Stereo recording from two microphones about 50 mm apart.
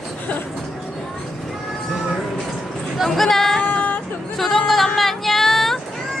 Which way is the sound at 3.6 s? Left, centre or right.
Left.